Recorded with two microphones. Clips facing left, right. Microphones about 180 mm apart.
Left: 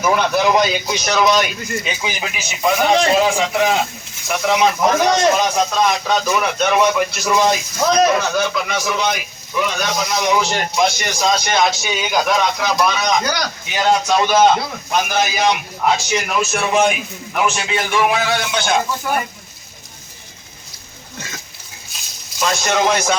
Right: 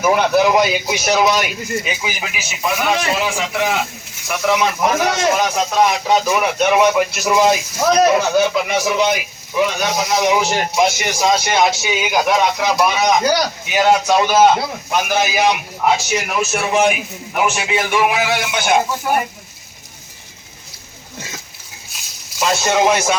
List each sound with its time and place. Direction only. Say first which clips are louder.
0.0 s a man's voice: right 2 dB; 5° right (ahead or behind)
2.8 s a man's voice: left 5 dB; 30° left (ahead or behind)
4.4 s speech: left 1 dB; 15° left (ahead or behind)
4.8 s a man's voice: left 2 dB; 5° right (ahead or behind)
16.5 s a man's voice: even; 20° right (ahead or behind)
17.5 s a man's voice: right 2 dB; 5° right (ahead or behind)
21.9 s a sound: right 2 dB; 5° right (ahead or behind)